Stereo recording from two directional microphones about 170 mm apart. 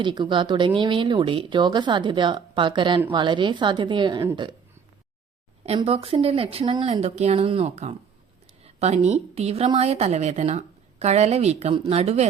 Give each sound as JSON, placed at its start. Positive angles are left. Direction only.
{"t": 0.0, "sound": "a woman's voice", "side_deg": -25}
{"t": 5.6, "sound": "a woman's voice", "side_deg": -35}